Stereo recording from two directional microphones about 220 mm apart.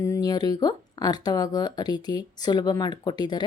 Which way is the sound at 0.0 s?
15° left (ahead or behind).